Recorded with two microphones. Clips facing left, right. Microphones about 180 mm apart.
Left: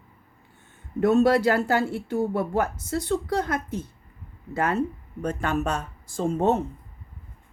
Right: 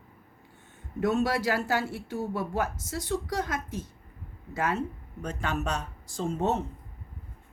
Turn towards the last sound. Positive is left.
turn(degrees=55)  # may be behind; listen again after turning